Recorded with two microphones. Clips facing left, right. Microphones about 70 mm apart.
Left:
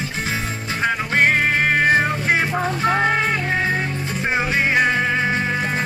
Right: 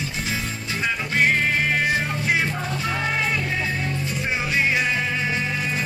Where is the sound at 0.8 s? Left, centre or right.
Left.